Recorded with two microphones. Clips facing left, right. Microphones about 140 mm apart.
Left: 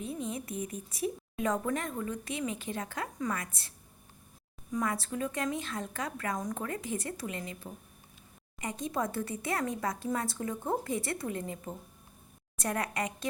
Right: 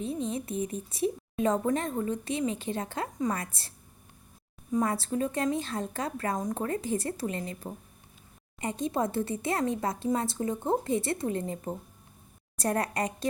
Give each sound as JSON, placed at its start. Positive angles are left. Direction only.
{"t": 0.0, "sound": "speech", "side_deg": -25}
{"t": 4.7, "sound": "a woman's voice", "side_deg": -30}
{"t": 8.6, "sound": "a woman's voice", "side_deg": -30}